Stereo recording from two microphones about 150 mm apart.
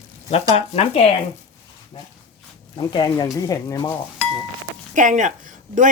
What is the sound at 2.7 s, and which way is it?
Speech, 30° left (ahead or behind).